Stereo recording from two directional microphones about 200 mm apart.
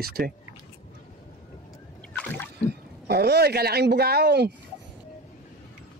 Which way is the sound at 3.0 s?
55° right (ahead or behind).